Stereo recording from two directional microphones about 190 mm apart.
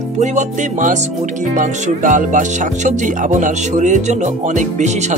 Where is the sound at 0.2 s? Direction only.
40° right (ahead or behind).